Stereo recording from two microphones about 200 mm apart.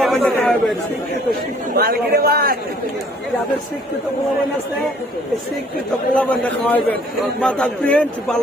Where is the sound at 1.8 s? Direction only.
50° right (ahead or behind).